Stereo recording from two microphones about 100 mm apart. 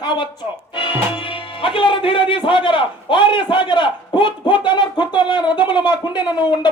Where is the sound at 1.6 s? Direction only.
60° left (ahead or behind).